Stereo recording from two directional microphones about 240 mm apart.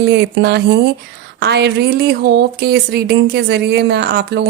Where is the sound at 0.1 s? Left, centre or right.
Right.